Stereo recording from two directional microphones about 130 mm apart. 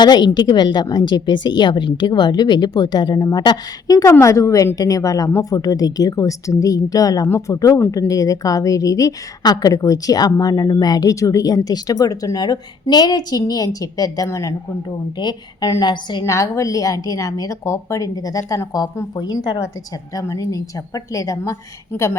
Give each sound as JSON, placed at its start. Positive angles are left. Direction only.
{"t": 0.0, "sound": "a woman's voice", "side_deg": 30}
{"t": 15.2, "sound": "a woman's voice", "side_deg": 35}
{"t": 16.2, "sound": "a woman's voice", "side_deg": 25}